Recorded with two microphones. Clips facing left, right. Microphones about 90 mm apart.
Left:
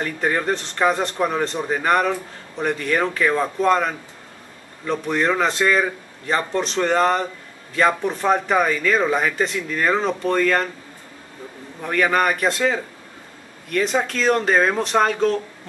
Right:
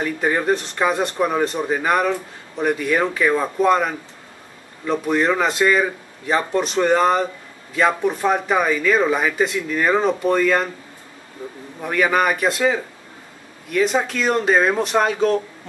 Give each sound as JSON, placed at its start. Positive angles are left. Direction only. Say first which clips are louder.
{"t": 0.0, "sound": "speech", "louder": "right 2 dB", "side_deg": -5}
{"t": 11.8, "sound": "speech", "louder": "right 1 dB", "side_deg": -5}